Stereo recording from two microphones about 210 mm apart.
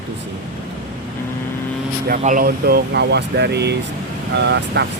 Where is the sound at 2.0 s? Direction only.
40° right (ahead or behind).